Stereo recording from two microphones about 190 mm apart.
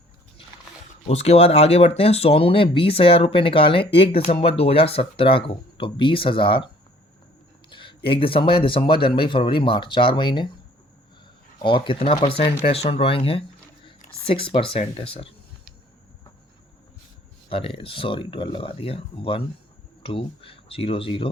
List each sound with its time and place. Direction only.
1.0 s speech: 35° left (ahead or behind)
7.7 s speech: 25° left (ahead or behind)
11.6 s speech: 25° left (ahead or behind)
17.5 s speech: 25° left (ahead or behind)